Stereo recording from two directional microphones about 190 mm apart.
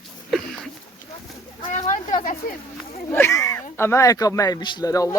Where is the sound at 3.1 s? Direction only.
15° left (ahead or behind).